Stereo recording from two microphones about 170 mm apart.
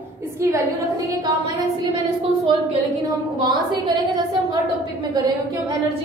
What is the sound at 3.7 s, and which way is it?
Speech, 25° right (ahead or behind).